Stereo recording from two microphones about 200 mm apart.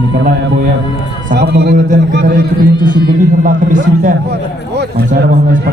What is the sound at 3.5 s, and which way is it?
A man's voice, 40° right (ahead or behind).